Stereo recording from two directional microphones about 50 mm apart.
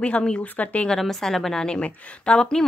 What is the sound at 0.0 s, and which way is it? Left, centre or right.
Speech, centre.